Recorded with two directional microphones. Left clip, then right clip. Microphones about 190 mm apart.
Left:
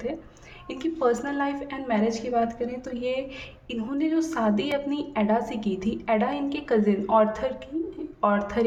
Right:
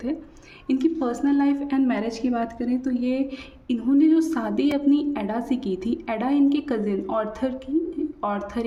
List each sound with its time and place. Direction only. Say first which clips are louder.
0.7 s a woman's voice: right 1 dB; 30° right (ahead or behind)